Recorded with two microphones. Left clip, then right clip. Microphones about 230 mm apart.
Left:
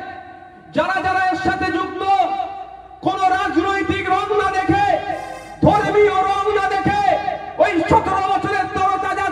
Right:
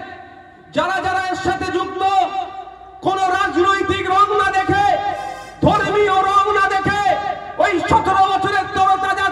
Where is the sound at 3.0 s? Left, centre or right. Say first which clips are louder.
Even; right.